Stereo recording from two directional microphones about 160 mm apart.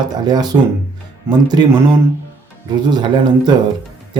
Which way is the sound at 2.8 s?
25° right (ahead or behind).